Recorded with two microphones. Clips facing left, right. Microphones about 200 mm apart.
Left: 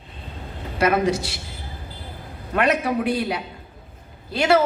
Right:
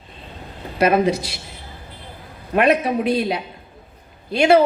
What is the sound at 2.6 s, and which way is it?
Speech, 25° right (ahead or behind).